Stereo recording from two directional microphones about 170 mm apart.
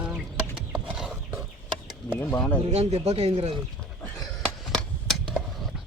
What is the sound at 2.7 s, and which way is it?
Speech, 40° right (ahead or behind).